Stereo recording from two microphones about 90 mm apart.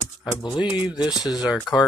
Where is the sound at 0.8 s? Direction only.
50° left (ahead or behind).